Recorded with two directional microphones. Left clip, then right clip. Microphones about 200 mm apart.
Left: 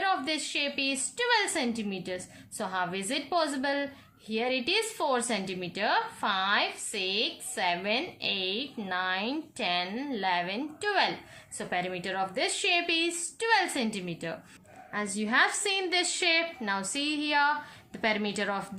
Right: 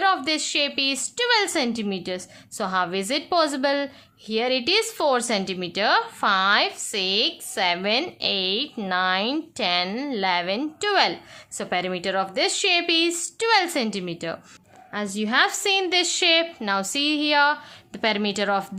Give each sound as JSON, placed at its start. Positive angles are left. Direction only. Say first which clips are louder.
{"t": 0.0, "sound": "a woman's voice", "louder": "right 7 dB", "side_deg": -45}